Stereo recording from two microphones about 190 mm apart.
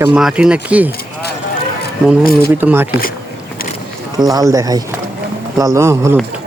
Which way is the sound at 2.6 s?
10° right (ahead or behind).